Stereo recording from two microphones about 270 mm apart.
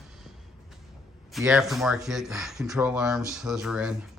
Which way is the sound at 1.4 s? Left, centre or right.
Centre.